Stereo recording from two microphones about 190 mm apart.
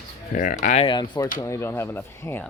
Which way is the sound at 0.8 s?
25° left (ahead or behind).